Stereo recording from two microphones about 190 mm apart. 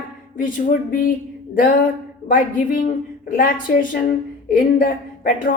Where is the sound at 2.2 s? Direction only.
45° left (ahead or behind).